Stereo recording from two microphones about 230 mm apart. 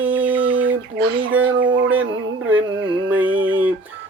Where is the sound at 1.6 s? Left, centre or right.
Right.